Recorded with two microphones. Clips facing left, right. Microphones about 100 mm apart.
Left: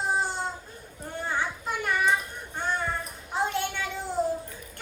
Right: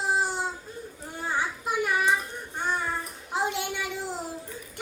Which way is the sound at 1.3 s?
10° right (ahead or behind).